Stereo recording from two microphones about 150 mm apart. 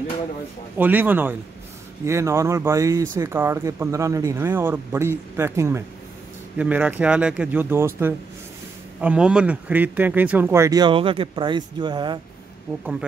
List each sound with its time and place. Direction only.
0.7 s speech: 10° right (ahead or behind); by 12.2 s 30° right (ahead or behind)